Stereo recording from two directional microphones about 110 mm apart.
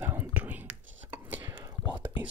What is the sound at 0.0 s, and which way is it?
Whispering, 15° right (ahead or behind).